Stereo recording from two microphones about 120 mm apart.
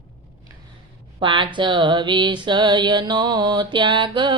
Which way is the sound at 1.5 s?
40° right (ahead or behind).